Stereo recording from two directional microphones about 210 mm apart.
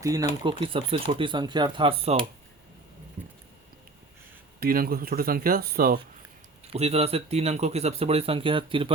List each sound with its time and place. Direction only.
0.0 s speech: 15° right (ahead or behind)
4.6 s speech: 45° right (ahead or behind)
6.7 s speech: 30° right (ahead or behind)